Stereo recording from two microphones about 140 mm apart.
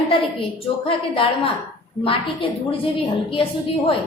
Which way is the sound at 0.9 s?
40° left (ahead or behind).